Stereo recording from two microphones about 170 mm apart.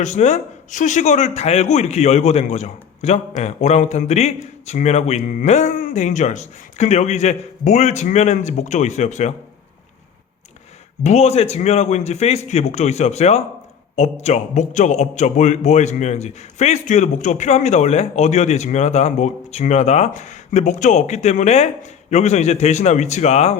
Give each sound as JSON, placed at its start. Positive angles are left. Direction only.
{"t": 0.0, "sound": "speech", "side_deg": 40}
{"t": 11.0, "sound": "a man's voice", "side_deg": 40}